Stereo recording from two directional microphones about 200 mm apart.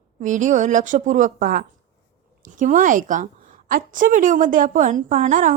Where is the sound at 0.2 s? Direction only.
40° right (ahead or behind).